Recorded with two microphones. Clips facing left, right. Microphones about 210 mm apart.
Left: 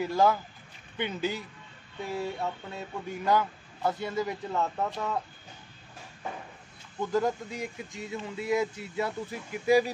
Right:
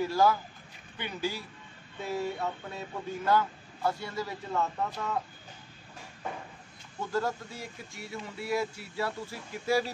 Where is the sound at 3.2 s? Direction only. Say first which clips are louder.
Left 1 dB; 20° left (ahead or behind).